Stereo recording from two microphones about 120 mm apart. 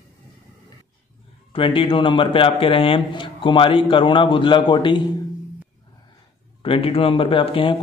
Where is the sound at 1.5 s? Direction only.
45° left (ahead or behind).